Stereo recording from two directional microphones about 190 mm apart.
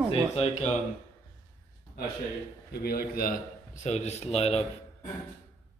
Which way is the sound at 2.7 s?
50° left (ahead or behind).